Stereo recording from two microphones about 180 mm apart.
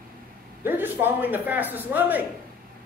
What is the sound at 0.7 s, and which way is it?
Speech, 10° right (ahead or behind).